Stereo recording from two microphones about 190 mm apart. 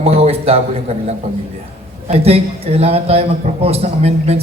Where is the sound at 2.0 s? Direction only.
30° right (ahead or behind).